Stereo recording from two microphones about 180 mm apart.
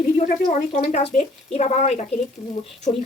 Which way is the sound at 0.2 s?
45° left (ahead or behind).